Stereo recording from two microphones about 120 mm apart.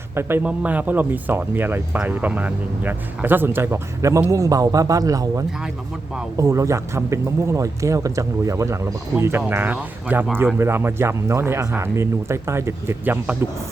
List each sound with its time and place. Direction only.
0.2 s speech: 20° right (ahead or behind)